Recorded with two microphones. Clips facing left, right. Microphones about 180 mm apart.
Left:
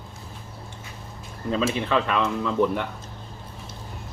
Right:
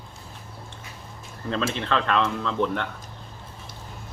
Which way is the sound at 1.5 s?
10° left (ahead or behind).